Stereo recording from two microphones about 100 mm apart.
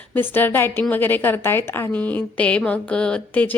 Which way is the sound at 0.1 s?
20° left (ahead or behind).